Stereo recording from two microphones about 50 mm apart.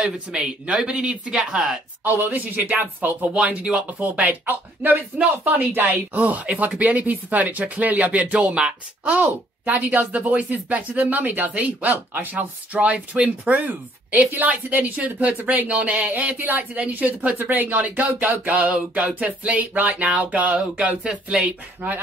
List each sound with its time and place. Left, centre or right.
0.0 s speech: centre
0.8 s a sound: centre
2.0 s speech: right
8.4 s speech: centre
9.0 s speech: right
18.7 s a sound: centre
19.1 s speech: right
20.2 s a sound: right
21.8 s speech: right